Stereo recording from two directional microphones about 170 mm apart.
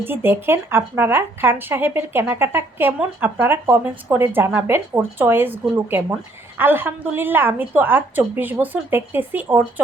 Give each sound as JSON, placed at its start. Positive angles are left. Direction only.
{"t": 0.0, "sound": "speech", "side_deg": -10}